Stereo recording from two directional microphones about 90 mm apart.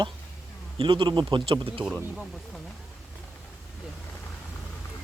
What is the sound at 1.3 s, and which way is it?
Speech, 75° right (ahead or behind).